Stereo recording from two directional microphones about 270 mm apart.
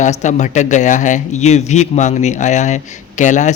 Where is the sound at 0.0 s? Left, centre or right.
Left.